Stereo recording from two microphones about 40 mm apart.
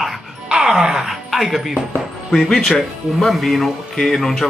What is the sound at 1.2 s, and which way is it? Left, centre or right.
Speech, centre.